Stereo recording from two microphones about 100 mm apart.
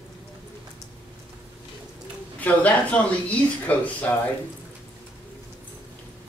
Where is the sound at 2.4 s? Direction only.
15° left (ahead or behind).